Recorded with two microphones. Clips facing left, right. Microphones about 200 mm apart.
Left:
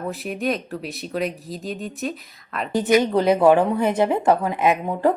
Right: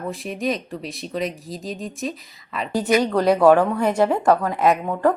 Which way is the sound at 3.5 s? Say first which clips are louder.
Right 2 dB; 20° left (ahead or behind).